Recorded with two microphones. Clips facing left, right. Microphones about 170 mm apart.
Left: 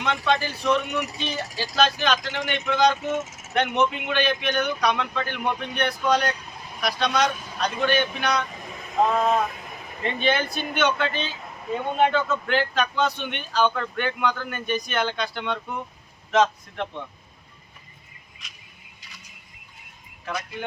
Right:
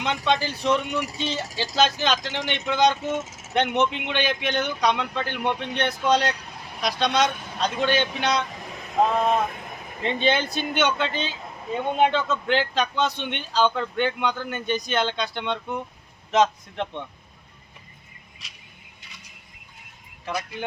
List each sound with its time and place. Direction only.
0.0 s speech: 20° right (ahead or behind)
10.0 s speech: 20° right (ahead or behind)
20.2 s speech: 20° right (ahead or behind)